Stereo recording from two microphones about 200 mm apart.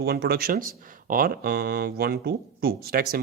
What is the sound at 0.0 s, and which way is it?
Speech, 50° right (ahead or behind).